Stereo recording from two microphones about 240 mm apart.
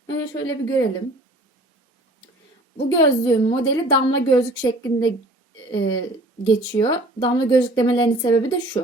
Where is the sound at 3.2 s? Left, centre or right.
Centre.